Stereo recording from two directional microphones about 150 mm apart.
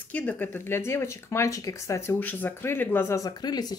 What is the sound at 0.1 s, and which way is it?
A woman's voice, 10° left (ahead or behind).